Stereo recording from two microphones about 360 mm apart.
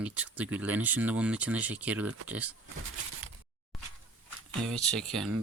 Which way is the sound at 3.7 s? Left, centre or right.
Centre.